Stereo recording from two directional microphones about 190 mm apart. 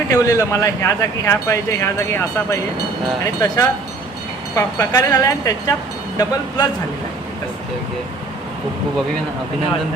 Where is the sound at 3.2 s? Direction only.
20° left (ahead or behind).